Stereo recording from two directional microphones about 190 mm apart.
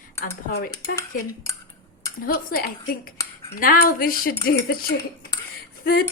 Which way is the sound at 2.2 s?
50° left (ahead or behind).